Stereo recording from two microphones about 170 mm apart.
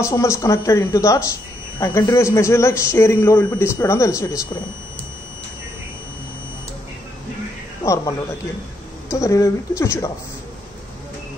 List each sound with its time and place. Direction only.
0.0 s a man's voice: 15° left (ahead or behind)
7.8 s a man's voice: 20° left (ahead or behind)
9.1 s a man's voice: 20° left (ahead or behind)